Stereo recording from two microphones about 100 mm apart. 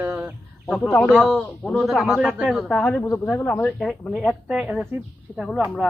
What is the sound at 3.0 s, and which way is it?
Speech, 30° left (ahead or behind).